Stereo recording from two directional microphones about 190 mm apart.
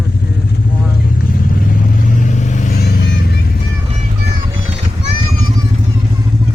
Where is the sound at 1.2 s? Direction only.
50° left (ahead or behind).